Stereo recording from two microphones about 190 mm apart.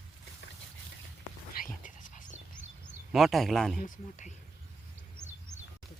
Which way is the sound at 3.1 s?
Centre (ahead or behind).